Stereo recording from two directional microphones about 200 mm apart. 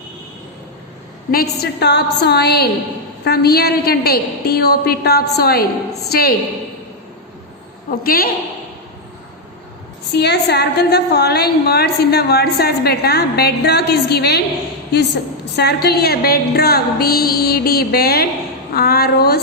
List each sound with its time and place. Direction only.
1.3 s a woman's voice: 50° left (ahead or behind)
8.0 s a woman's voice: 50° left (ahead or behind)
10.1 s a woman's voice: 55° left (ahead or behind)